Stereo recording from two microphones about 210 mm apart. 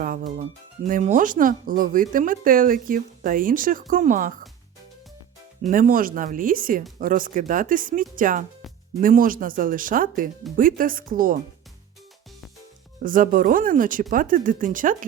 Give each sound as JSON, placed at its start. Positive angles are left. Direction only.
{"t": 0.0, "sound": "speech", "side_deg": -40}
{"t": 5.6, "sound": "speech", "side_deg": -40}
{"t": 13.0, "sound": "speech", "side_deg": -40}